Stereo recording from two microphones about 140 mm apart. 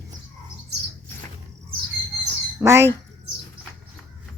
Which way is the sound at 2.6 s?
20° right (ahead or behind).